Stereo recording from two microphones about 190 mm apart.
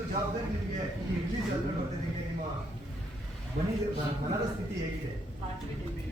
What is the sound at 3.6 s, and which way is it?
Speech, 50° right (ahead or behind).